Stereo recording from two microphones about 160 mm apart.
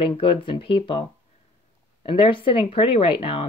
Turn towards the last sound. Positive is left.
turn(degrees=35)  # may be behind; listen again after turning